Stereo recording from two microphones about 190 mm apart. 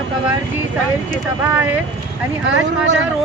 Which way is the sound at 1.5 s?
10° right (ahead or behind).